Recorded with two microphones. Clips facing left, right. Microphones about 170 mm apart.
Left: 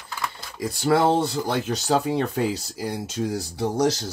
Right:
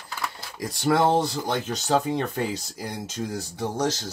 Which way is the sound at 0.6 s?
5° left (ahead or behind).